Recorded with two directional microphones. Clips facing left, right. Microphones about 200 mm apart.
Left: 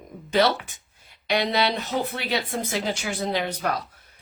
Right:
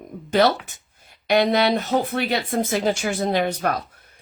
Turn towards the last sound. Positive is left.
turn(degrees=-50)  # may be behind; listen again after turning